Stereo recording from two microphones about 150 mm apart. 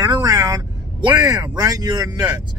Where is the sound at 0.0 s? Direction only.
30° right (ahead or behind).